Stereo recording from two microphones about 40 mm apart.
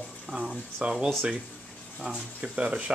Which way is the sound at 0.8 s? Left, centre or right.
Right.